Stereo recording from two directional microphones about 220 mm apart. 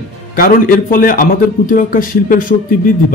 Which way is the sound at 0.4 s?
40° left (ahead or behind).